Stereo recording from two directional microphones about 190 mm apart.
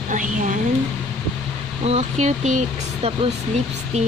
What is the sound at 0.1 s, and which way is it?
Speech, 40° right (ahead or behind).